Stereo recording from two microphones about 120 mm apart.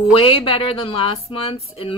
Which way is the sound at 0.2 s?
50° left (ahead or behind).